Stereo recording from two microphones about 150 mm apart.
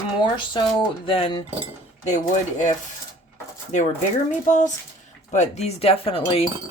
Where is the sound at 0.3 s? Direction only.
30° left (ahead or behind).